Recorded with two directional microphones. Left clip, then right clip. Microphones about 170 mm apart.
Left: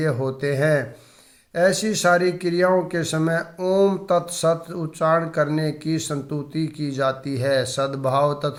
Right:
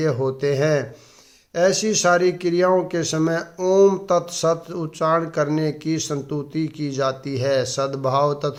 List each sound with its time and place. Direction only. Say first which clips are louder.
0.0 s speech: right 2 dB; 20° right (ahead or behind)
2.0 s speech: even; 20° right (ahead or behind)